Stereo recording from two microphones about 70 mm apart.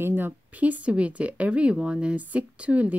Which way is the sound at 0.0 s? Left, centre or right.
Right.